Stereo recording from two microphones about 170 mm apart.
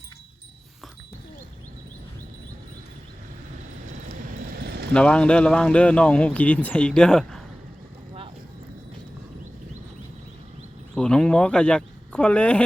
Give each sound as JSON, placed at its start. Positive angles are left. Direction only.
{"t": 4.5, "sound": "vehicle", "side_deg": -70}
{"t": 4.9, "sound": "speech", "side_deg": 5}
{"t": 10.9, "sound": "speech", "side_deg": 5}